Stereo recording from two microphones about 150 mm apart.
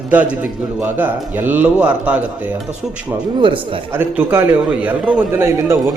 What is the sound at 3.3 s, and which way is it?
Speech, 35° right (ahead or behind).